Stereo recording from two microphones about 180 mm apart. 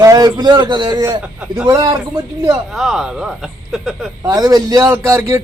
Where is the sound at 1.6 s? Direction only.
25° right (ahead or behind).